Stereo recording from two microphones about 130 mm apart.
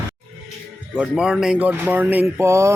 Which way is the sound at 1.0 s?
5° right (ahead or behind).